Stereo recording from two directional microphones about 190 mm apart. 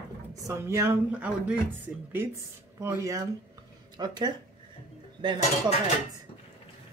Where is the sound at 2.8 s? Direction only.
15° right (ahead or behind).